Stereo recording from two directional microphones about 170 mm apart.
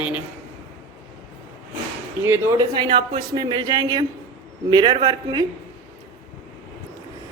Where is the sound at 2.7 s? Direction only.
30° right (ahead or behind).